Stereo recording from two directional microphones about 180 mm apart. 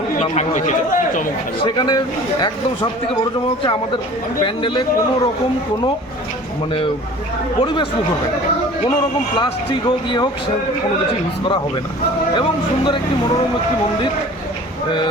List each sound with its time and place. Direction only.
0.2 s speech: 40° left (ahead or behind)
1.6 s a man's voice: 25° left (ahead or behind)
4.4 s a man's voice: 30° left (ahead or behind)
12.4 s a man's voice: 30° left (ahead or behind)